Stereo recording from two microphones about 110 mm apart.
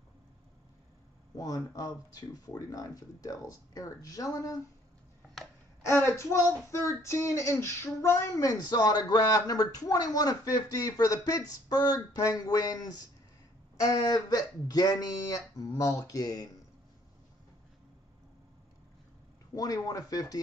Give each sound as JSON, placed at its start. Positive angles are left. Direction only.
{"t": 1.3, "sound": "speech", "side_deg": 35}
{"t": 5.9, "sound": "speech", "side_deg": 25}
{"t": 19.5, "sound": "speech", "side_deg": 35}